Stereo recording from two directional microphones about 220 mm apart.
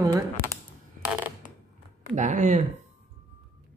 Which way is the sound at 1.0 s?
5° right (ahead or behind).